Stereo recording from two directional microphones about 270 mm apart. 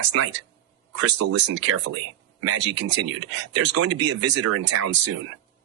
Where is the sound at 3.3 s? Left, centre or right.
Right.